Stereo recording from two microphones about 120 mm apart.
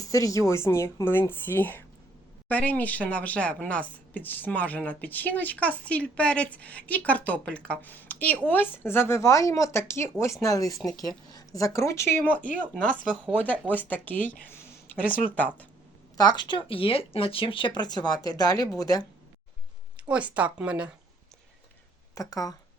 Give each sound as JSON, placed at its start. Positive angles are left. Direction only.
{"t": 0.1, "sound": "speech", "side_deg": 30}
{"t": 16.1, "sound": "speech", "side_deg": 35}
{"t": 20.1, "sound": "speech", "side_deg": -10}
{"t": 22.1, "sound": "speech", "side_deg": 30}